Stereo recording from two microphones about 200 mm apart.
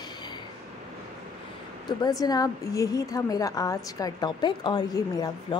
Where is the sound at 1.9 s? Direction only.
20° left (ahead or behind).